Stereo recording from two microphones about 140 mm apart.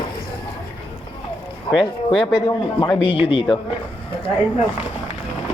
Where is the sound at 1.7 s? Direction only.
40° left (ahead or behind).